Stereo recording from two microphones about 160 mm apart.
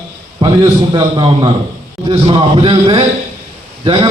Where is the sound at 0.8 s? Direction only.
30° right (ahead or behind).